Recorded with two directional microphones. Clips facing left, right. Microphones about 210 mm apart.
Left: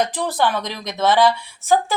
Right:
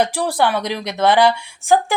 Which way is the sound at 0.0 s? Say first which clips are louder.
Right 2 dB; 10° right (ahead or behind).